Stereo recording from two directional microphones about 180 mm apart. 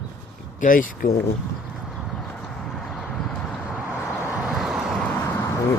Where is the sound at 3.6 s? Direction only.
10° right (ahead or behind).